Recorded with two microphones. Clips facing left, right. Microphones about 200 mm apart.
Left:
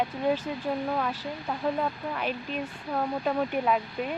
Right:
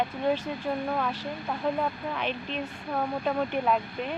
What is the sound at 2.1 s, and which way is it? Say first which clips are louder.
Speech: even; 5° left (ahead or behind).